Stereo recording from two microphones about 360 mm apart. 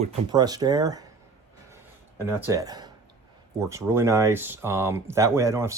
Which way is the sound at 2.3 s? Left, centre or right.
Centre.